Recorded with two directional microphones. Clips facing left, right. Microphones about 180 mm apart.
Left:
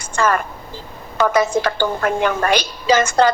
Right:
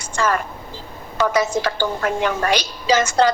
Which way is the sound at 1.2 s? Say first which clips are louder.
Left 2 dB; 55° left (ahead or behind).